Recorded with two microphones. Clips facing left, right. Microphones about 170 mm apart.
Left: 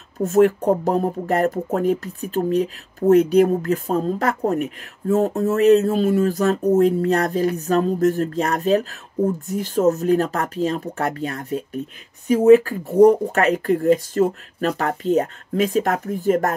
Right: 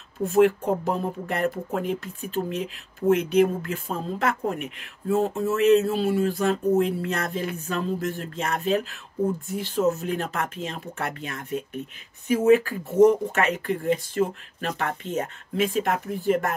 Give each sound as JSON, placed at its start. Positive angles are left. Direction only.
{"t": 0.2, "sound": "speech", "side_deg": 45}